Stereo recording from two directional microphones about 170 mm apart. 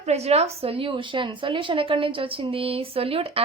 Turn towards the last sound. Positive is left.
turn(degrees=-35)  # may be behind; listen again after turning